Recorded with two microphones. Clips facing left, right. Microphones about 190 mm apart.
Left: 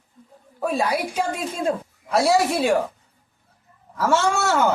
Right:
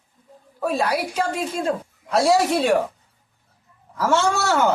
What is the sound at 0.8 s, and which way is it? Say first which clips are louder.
A man's voice: even; 10° left (ahead or behind).